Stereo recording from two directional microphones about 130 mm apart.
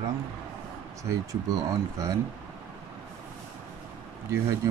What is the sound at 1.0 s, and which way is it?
Speech, 25° right (ahead or behind).